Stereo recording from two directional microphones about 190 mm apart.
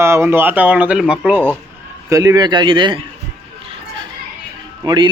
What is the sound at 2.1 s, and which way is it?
Speech, 20° right (ahead or behind).